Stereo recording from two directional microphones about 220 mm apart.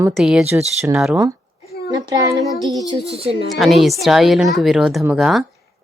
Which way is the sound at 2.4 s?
Centre (ahead or behind).